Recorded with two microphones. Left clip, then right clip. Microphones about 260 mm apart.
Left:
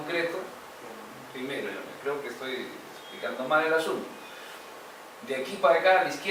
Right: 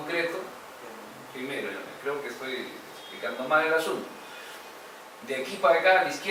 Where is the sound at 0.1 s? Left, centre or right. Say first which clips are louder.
Right 1 dB; centre.